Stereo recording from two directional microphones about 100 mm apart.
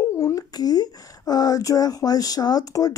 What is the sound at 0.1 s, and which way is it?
Speech, 30° left (ahead or behind).